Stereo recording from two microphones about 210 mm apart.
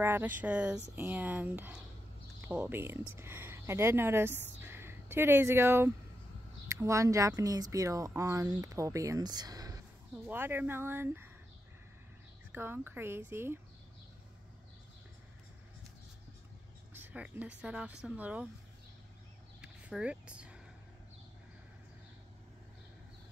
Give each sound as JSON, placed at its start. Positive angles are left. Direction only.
{"t": 0.0, "sound": "speech", "side_deg": -10}
{"t": 12.5, "sound": "speech", "side_deg": -10}
{"t": 16.9, "sound": "speech", "side_deg": -10}
{"t": 19.6, "sound": "a sound", "side_deg": -5}